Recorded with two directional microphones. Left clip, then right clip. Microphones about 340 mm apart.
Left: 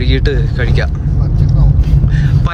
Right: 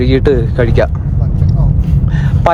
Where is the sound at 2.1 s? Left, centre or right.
Centre.